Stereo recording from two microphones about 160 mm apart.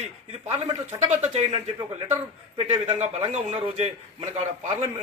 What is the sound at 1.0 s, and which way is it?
A man's voice, 45° right (ahead or behind).